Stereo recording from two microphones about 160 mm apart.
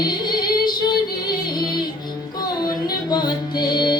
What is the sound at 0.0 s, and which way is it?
Female singing, 25° left (ahead or behind).